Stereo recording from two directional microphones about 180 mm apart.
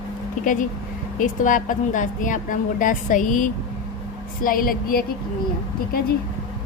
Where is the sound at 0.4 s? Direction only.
45° left (ahead or behind).